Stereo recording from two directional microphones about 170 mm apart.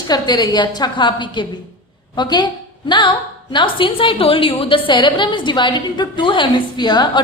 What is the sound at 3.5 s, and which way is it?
A woman's voice, 30° left (ahead or behind).